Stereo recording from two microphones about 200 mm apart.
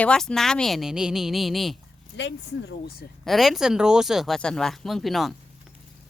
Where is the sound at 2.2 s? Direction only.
65° left (ahead or behind).